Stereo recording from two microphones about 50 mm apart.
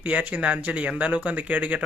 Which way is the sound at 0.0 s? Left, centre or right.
Right.